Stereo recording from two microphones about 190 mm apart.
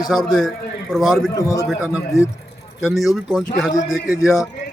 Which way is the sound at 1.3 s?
20° left (ahead or behind).